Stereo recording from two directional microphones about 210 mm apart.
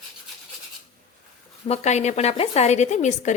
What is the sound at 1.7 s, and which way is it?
A woman's voice, 35° left (ahead or behind).